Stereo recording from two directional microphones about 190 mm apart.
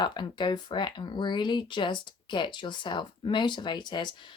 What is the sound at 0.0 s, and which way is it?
Speech, 25° left (ahead or behind).